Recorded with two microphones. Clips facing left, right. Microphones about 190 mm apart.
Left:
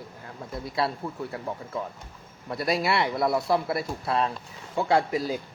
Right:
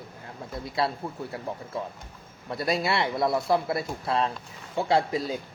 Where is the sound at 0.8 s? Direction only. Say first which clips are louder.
Even; 25° right (ahead or behind).